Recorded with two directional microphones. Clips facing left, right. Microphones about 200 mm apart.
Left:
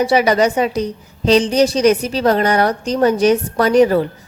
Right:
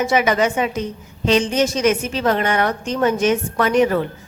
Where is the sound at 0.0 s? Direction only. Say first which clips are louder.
Left 4 dB; 35° left (ahead or behind).